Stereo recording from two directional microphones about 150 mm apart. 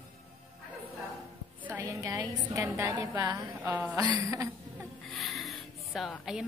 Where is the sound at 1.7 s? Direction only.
20° right (ahead or behind).